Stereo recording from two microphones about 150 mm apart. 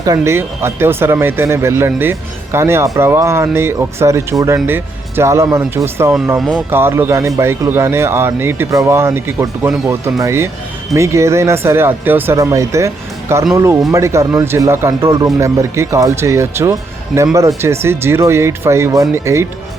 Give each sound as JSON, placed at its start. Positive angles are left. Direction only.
{"t": 0.0, "sound": "speech", "side_deg": -20}
{"t": 17.1, "sound": "speech", "side_deg": 0}
{"t": 17.6, "sound": "speech", "side_deg": -15}